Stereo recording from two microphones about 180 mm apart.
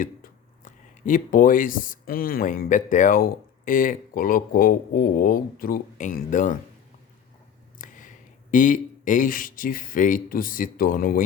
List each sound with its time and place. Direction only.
0.0 s speech: 50° left (ahead or behind)
7.8 s speech: 45° left (ahead or behind)